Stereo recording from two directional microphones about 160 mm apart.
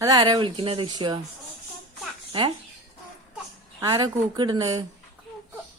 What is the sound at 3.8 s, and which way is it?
Speech, 25° right (ahead or behind).